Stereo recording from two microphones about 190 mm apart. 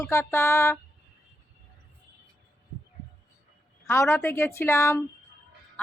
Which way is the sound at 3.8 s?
15° left (ahead or behind).